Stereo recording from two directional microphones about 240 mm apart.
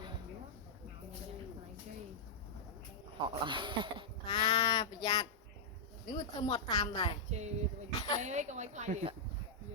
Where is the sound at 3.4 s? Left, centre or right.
Centre.